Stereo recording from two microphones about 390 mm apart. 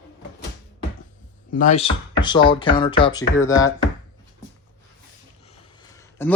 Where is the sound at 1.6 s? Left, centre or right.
Centre.